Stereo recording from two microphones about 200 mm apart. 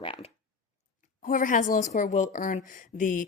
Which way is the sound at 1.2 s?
40° left (ahead or behind).